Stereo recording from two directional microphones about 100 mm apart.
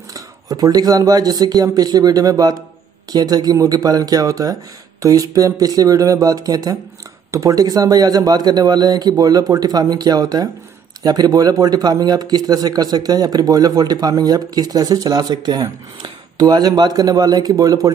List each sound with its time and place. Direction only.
0.1 s a man's voice: 40° right (ahead or behind)